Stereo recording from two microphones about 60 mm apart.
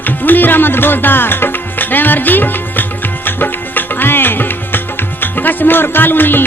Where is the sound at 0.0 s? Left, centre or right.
Left.